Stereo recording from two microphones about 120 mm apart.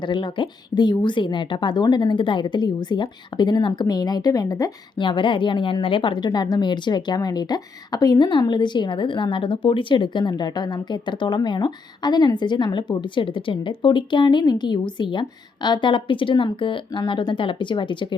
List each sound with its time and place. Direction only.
0.0 s a woman's voice: 40° left (ahead or behind)
4.9 s a woman's voice: 45° left (ahead or behind)